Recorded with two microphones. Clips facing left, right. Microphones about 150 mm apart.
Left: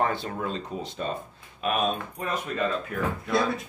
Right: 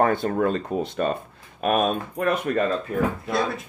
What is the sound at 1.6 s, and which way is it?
Speech, 45° right (ahead or behind).